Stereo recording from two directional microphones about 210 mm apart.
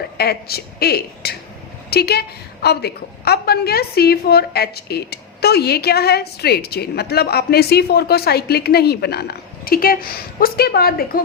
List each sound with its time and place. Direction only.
0.2 s a woman's voice: 50° left (ahead or behind)